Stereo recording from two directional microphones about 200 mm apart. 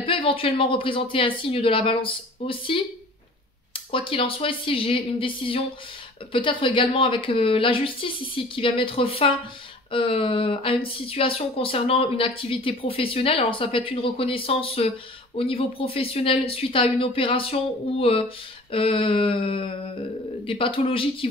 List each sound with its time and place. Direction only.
0.0 s speech: 25° left (ahead or behind)